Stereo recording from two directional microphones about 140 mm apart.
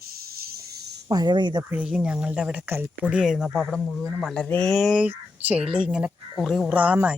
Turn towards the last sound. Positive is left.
turn(degrees=-10)  # may be behind; listen again after turning